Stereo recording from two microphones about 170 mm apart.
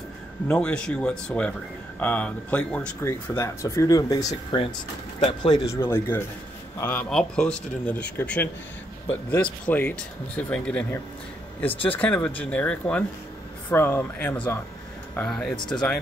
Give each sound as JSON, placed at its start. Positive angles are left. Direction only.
{"t": 0.5, "sound": "speech", "side_deg": 5}
{"t": 5.7, "sound": "speech", "side_deg": 15}